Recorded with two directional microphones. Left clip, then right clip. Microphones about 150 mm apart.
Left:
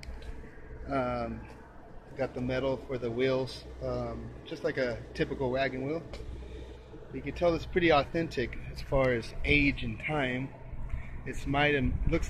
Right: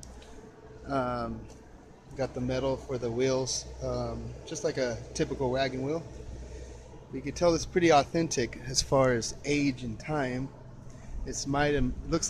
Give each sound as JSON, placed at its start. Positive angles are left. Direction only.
{"t": 0.8, "sound": "speech", "side_deg": -15}
{"t": 7.2, "sound": "speech", "side_deg": -35}
{"t": 10.0, "sound": "speech", "side_deg": -20}
{"t": 11.5, "sound": "speech", "side_deg": -30}